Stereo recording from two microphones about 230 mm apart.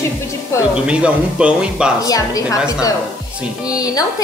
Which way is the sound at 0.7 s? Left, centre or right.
Centre.